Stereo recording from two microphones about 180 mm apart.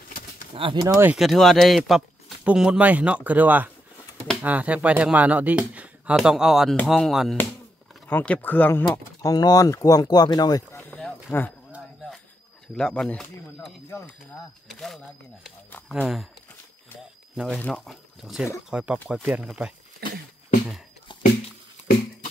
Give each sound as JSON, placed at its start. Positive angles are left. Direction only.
{"t": 0.6, "sound": "speech", "side_deg": -30}
{"t": 0.8, "sound": "speech", "side_deg": -15}
{"t": 1.1, "sound": "speech", "side_deg": 0}
{"t": 10.9, "sound": "a sound", "side_deg": 0}
{"t": 12.7, "sound": "speech", "side_deg": 5}
{"t": 13.8, "sound": "speech", "side_deg": 15}
{"t": 14.7, "sound": "speech", "side_deg": 0}
{"t": 17.6, "sound": "speech", "side_deg": 5}
{"t": 21.1, "sound": "a sound", "side_deg": 25}